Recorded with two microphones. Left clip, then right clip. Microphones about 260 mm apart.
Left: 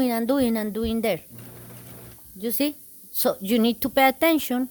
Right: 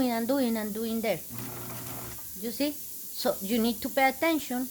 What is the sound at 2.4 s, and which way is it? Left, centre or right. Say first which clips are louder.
Speech: left 5 dB; left.